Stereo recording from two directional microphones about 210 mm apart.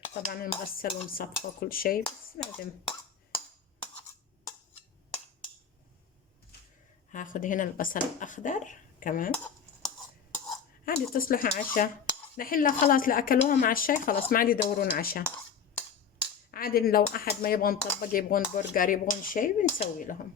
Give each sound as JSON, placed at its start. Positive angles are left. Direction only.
{"t": 0.1, "sound": "stir", "side_deg": 45}
{"t": 7.1, "sound": "speech", "side_deg": 40}
{"t": 9.3, "sound": "a sound", "side_deg": 5}
{"t": 10.8, "sound": "stir", "side_deg": 45}
{"t": 12.4, "sound": "speech", "side_deg": 40}
{"t": 14.3, "sound": "stir", "side_deg": 45}
{"t": 16.5, "sound": "stir", "side_deg": 45}
{"t": 18.5, "sound": "speech", "side_deg": 40}